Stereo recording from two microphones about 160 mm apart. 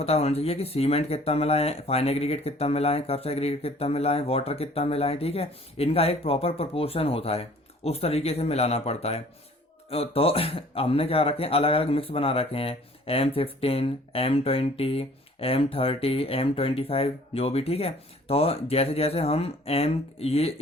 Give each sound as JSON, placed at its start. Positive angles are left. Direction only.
{"t": 0.0, "sound": "a man's voice", "side_deg": 40}